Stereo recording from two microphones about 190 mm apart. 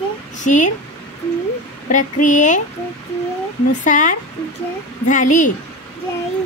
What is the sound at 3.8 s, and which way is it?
Speech, 40° left (ahead or behind).